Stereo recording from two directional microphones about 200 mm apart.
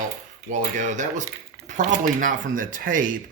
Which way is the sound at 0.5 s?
40° right (ahead or behind).